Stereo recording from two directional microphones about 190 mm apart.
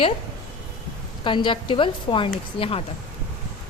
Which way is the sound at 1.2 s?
25° left (ahead or behind).